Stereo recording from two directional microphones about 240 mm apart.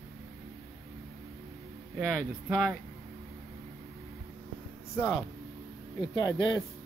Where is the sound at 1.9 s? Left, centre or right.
Centre.